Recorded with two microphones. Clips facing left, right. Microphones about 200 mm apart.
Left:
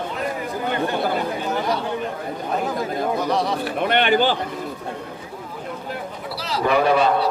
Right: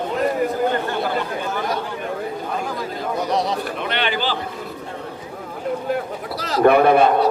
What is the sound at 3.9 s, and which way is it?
Speech, 50° left (ahead or behind).